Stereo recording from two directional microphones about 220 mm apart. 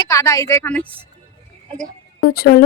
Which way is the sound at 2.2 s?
45° left (ahead or behind).